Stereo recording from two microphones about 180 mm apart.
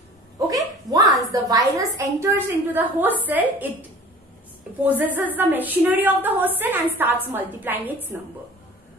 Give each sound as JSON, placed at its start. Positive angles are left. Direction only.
{"t": 0.5, "sound": "a sound", "side_deg": -20}
{"t": 1.3, "sound": "a woman's voice", "side_deg": -20}
{"t": 4.8, "sound": "a woman's voice", "side_deg": -10}